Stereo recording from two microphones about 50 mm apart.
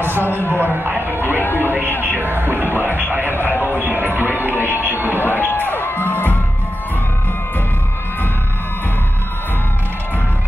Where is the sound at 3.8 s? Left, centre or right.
Right.